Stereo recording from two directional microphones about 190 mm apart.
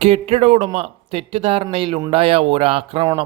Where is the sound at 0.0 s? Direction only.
30° right (ahead or behind).